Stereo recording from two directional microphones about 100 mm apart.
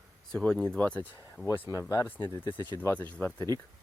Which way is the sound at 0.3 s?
10° left (ahead or behind).